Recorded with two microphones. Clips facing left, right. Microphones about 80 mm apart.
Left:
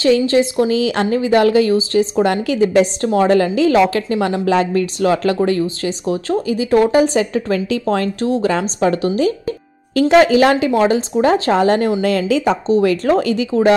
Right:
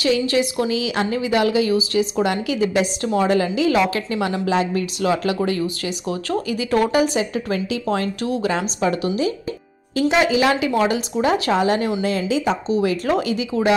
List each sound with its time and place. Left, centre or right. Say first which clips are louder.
0.0 s a woman's voice: left 6 dB; left
0.7 s a woman's voice: left 5 dB; left
1.8 s a woman's voice: left 4 dB; left
2.2 s a woman's voice: left 5 dB; left
6.0 s speech: left 5 dB; left
7.2 s a woman's voice: left 5 dB; left
8.2 s speech: left 5 dB; left
8.5 s a woman's voice: left 3 dB; left
10.7 s a woman's voice: left 5 dB; left
12.0 s speech: left 5 dB; left
13.0 s a woman's voice: left 5 dB; left